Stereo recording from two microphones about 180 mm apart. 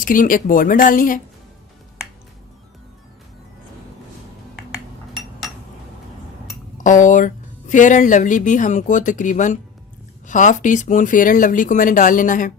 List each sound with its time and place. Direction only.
0.0 s speech: 50° left (ahead or behind)
6.7 s speech: 45° left (ahead or behind)